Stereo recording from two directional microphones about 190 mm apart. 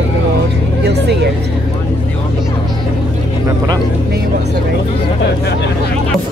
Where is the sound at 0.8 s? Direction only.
60° right (ahead or behind).